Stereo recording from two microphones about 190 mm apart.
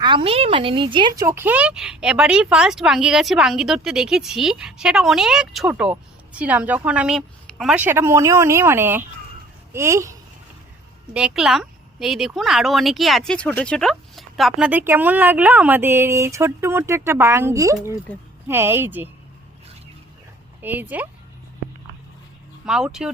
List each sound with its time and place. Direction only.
0.0 s speech: 25° right (ahead or behind); by 19.0 s 10° right (ahead or behind)
20.6 s speech: 10° right (ahead or behind)
22.6 s speech: 5° right (ahead or behind)